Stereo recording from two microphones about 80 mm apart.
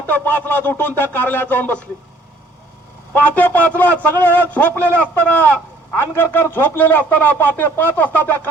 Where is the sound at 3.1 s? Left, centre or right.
Left.